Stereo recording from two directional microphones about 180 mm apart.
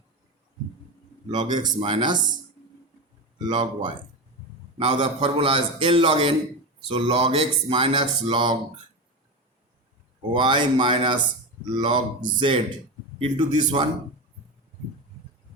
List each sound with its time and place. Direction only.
1.3 s speech: 25° right (ahead or behind)
3.3 s speech: 25° right (ahead or behind)
10.3 s speech: 25° right (ahead or behind)